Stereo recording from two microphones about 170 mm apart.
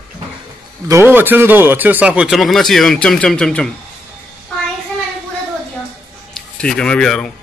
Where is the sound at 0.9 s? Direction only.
10° right (ahead or behind); by 3.7 s 5° left (ahead or behind).